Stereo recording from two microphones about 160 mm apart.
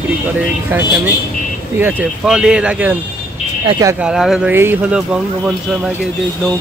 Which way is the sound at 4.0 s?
5° right (ahead or behind).